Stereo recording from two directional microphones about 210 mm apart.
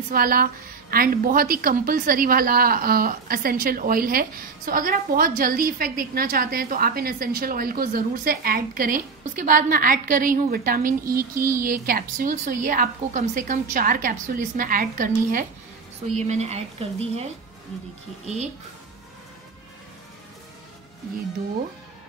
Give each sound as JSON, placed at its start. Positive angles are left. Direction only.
{"t": 0.1, "sound": "a woman's voice", "side_deg": -45}
{"t": 11.3, "sound": "speech", "side_deg": -15}
{"t": 11.6, "sound": "a woman's voice", "side_deg": -45}